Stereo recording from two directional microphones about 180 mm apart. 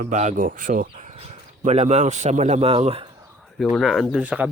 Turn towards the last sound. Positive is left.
turn(degrees=-5)  # may be behind; listen again after turning